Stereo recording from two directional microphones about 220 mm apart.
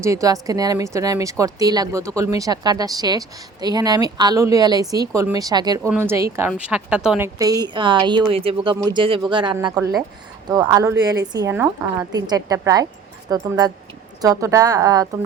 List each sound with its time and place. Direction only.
0.0 s speech: 15° right (ahead or behind)
7.3 s speech: 15° right (ahead or behind)